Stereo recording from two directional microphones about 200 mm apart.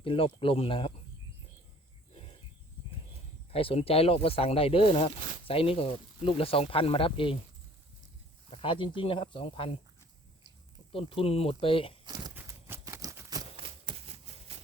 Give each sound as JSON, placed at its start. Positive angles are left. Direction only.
{"t": 0.0, "sound": "speech", "side_deg": 25}
{"t": 3.5, "sound": "speech", "side_deg": 30}
{"t": 8.4, "sound": "speech", "side_deg": 25}
{"t": 10.9, "sound": "speech", "side_deg": 30}
{"t": 12.0, "sound": "a sound", "side_deg": -20}
{"t": 12.3, "sound": "a sound", "side_deg": -10}